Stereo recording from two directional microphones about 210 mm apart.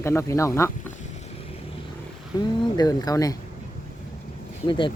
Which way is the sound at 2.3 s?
20° left (ahead or behind).